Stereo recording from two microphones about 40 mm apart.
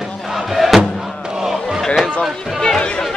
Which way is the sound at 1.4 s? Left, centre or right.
Centre.